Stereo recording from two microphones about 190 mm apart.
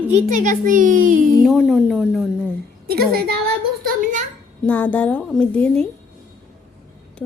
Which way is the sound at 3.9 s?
45° right (ahead or behind).